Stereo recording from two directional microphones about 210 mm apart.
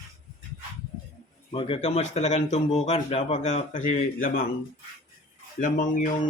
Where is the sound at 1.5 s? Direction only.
25° left (ahead or behind).